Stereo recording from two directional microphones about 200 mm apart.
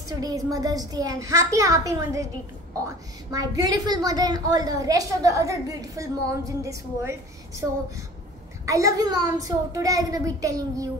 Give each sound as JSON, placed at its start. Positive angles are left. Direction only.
{"t": 0.1, "sound": "a woman's voice", "side_deg": -20}
{"t": 3.3, "sound": "a woman's voice", "side_deg": -20}